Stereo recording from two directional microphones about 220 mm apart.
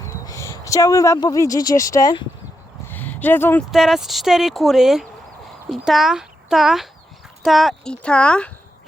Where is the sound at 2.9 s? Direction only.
10° left (ahead or behind).